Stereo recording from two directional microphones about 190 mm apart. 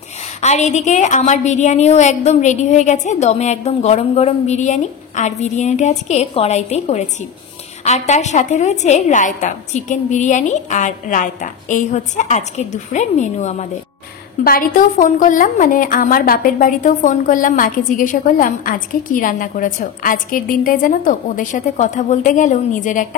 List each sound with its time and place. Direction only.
0.4 s a woman's voice: 40° left (ahead or behind)
14.4 s a woman's voice: 50° left (ahead or behind)